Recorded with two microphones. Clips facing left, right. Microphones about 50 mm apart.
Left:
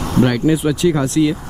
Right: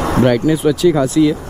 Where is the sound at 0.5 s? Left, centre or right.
Centre.